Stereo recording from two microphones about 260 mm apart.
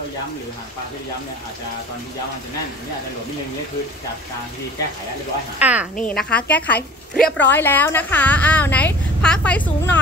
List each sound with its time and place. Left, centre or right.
5.6 s a woman's voice: centre
6.0 s a woman's voice: centre
7.2 s speech: left
7.4 s a woman's voice: centre